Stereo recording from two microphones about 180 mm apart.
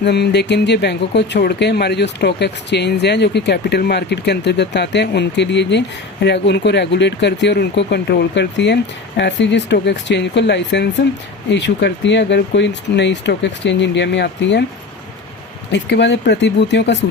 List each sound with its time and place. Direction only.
0.0 s speech: 65° left (ahead or behind)
15.7 s speech: 70° left (ahead or behind)